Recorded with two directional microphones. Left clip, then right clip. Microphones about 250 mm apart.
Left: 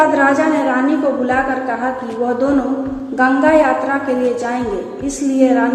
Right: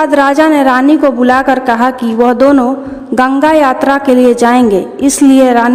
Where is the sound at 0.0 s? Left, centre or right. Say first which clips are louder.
Right 5 dB; right.